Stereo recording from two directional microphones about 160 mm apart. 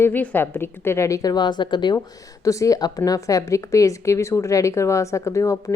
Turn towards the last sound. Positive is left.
turn(degrees=20)  # may be behind; listen again after turning